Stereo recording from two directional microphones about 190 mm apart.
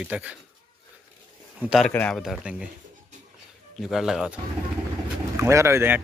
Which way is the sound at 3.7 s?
Centre (ahead or behind).